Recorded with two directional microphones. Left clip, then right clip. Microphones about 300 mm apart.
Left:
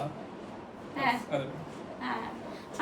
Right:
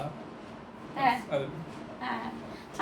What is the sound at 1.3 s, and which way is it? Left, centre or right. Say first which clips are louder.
Speech: right 2 dB; centre.